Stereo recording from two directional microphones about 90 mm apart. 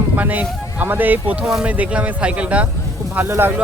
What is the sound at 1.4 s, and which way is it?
Speech, 5° right (ahead or behind).